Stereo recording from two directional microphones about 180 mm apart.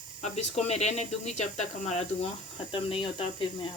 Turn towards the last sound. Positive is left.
turn(degrees=30)  # may be behind; listen again after turning